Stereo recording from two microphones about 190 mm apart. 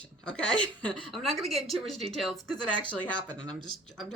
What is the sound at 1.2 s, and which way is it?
Speech, centre (ahead or behind).